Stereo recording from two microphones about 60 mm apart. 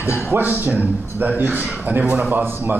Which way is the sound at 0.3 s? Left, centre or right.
Right.